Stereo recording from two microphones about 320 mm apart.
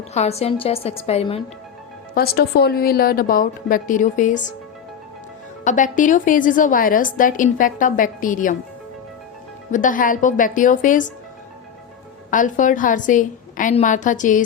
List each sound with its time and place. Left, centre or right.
0.1 s a woman's voice: centre
2.1 s a woman's voice: left
5.6 s a woman's voice: left
9.7 s a woman's voice: left
12.3 s a woman's voice: left